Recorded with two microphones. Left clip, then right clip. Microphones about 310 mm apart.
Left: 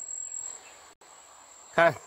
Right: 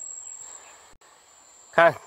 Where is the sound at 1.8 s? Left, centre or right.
Centre.